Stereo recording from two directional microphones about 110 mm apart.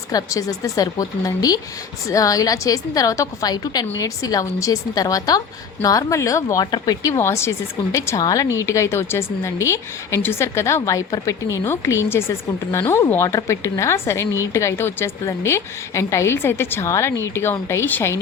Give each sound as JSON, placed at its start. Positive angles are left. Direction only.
{"t": 0.1, "sound": "a woman's voice", "side_deg": 30}